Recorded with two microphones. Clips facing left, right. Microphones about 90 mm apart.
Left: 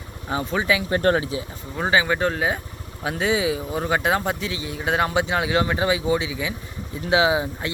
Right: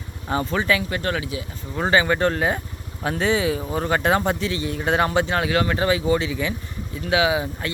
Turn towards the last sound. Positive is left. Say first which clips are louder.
# left 1 dB
turn(degrees=20)  # may be behind; listen again after turning